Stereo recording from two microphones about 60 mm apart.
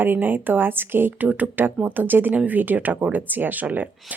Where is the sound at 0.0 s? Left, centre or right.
Right.